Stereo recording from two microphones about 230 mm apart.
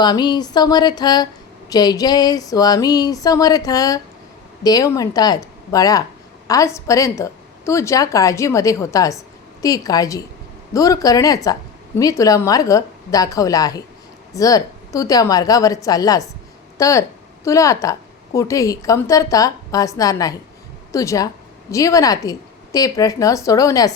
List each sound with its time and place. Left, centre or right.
0.0 s a woman's voice: centre